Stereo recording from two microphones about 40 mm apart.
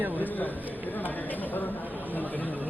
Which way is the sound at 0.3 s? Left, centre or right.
Left.